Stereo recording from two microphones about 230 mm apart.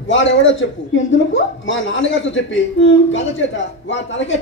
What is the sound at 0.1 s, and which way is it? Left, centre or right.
A man's voice, left.